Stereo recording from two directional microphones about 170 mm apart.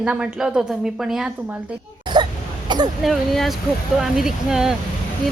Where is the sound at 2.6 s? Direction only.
25° right (ahead or behind).